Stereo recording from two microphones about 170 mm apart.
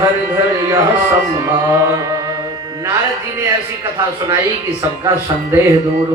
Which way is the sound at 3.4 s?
20° right (ahead or behind).